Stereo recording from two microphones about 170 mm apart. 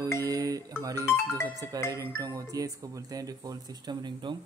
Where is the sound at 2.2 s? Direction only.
20° right (ahead or behind).